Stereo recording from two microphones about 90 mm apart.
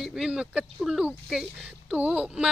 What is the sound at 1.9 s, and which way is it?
Speech, 15° right (ahead or behind).